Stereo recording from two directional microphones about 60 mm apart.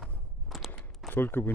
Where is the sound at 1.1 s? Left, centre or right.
Left.